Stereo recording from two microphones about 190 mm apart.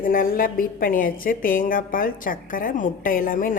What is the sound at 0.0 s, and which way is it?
A woman's voice, 50° left (ahead or behind).